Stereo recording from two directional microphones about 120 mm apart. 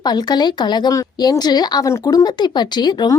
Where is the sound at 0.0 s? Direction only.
35° left (ahead or behind).